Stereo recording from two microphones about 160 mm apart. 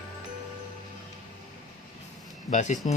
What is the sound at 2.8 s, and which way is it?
Speech, 40° left (ahead or behind).